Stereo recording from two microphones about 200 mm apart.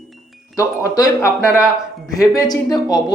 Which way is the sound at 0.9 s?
15° left (ahead or behind).